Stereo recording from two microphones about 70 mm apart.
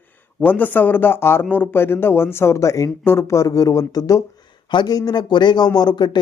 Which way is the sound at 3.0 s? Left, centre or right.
Left.